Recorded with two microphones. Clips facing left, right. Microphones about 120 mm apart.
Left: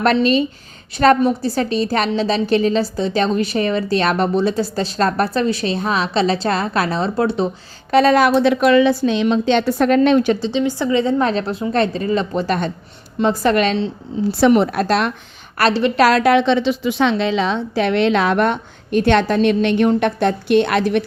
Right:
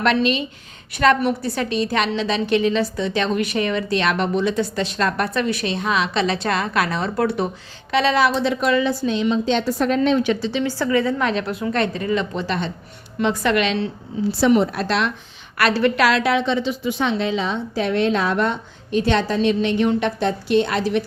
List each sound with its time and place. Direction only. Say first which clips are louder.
0.0 s a woman's voice: left 4 dB; 35° left (ahead or behind)
7.9 s a woman's voice: left 5 dB; 45° left (ahead or behind); by 10.2 s 65° left (ahead or behind)
10.5 s a woman's voice: left 3 dB; 20° left (ahead or behind)
11.2 s a woman's voice: left 3 dB; 35° left (ahead or behind)
13.2 s a woman's voice: left 4 dB; 35° left (ahead or behind)
14.3 s a woman's voice: left 3 dB; 60° left (ahead or behind)
14.8 s a woman's voice: left 4 dB; 45° left (ahead or behind)
15.5 s a woman's voice: left 3 dB; 35° left (ahead or behind)
16.3 s a woman's voice: left 6 dB; 75° left (ahead or behind)